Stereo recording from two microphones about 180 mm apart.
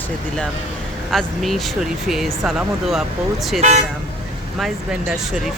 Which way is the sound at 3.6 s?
40° right (ahead or behind).